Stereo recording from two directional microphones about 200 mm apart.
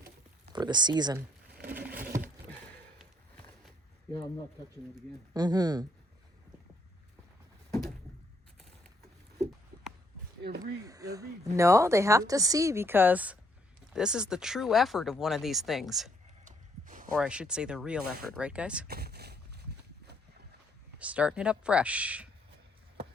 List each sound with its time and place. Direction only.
0.5 s speech: 20° right (ahead or behind)
1.6 s a sound: 10° right (ahead or behind)
5.3 s speech: 20° right (ahead or behind)
7.7 s a sound: centre (ahead or behind)
10.6 s speech: 15° right (ahead or behind); by 16.1 s centre (ahead or behind)
16.4 s a sound: 40° right (ahead or behind)
17.2 s speech: 5° right (ahead or behind)
18.9 s boat: 50° right (ahead or behind)
21.0 s speech: 5° right (ahead or behind)